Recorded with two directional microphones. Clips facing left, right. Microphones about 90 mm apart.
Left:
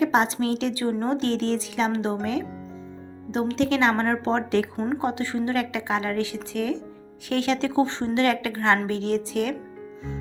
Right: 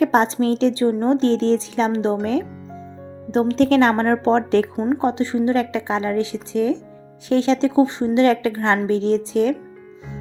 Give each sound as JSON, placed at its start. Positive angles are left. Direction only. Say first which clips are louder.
{"t": 0.0, "sound": "a woman's voice", "louder": "right 5 dB", "side_deg": -40}
{"t": 3.3, "sound": "a woman's voice", "louder": "right 7 dB", "side_deg": -40}